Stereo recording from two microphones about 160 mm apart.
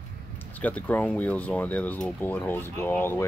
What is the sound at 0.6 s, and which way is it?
Speech, 10° left (ahead or behind).